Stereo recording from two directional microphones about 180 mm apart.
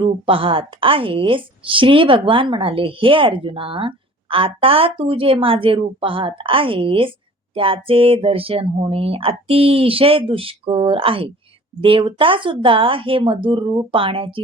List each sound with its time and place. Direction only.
0.3 s a woman's voice: 30° right (ahead or behind)